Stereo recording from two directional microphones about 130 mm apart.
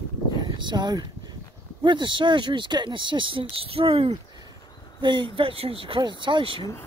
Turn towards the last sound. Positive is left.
turn(degrees=-40)  # may be behind; listen again after turning